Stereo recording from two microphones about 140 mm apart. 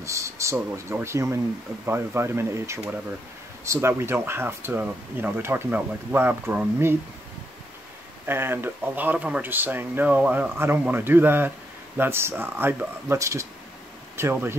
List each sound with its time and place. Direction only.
0.0 s speech: 20° right (ahead or behind)
8.3 s speech: 15° right (ahead or behind)